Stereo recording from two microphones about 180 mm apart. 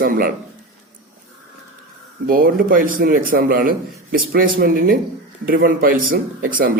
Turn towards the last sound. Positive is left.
turn(degrees=-50)  # may be behind; listen again after turning